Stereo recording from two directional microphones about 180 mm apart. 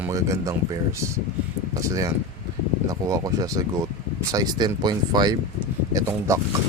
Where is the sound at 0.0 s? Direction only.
20° right (ahead or behind).